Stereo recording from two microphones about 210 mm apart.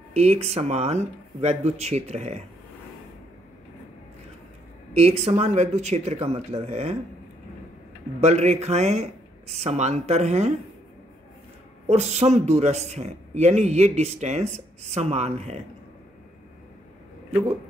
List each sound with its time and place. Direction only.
0.1 s speech: 30° right (ahead or behind)
4.9 s speech: 30° right (ahead or behind)
8.2 s speech: 30° right (ahead or behind)
11.9 s speech: 30° right (ahead or behind)